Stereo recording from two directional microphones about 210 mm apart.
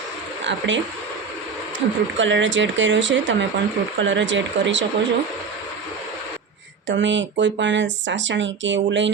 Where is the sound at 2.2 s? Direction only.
60° right (ahead or behind).